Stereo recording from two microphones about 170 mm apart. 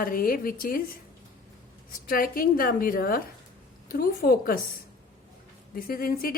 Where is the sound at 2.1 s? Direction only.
60° left (ahead or behind).